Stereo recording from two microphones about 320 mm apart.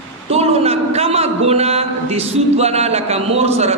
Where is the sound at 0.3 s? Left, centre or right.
Centre.